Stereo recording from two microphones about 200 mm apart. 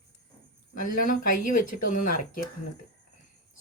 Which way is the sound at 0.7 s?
45° left (ahead or behind).